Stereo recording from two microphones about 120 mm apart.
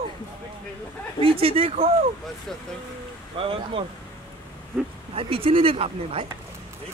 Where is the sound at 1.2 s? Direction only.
50° right (ahead or behind).